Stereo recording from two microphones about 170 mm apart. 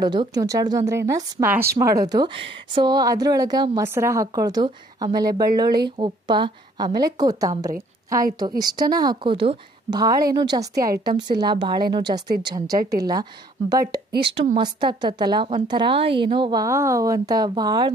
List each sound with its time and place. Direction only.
0.0 s a woman's voice: 25° right (ahead or behind)
14.1 s a woman's voice: 80° right
14.6 s a woman's voice: 25° right (ahead or behind)